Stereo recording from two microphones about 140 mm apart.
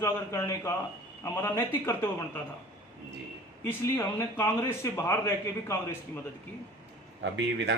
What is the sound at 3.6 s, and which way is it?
A man's voice, 20° left (ahead or behind).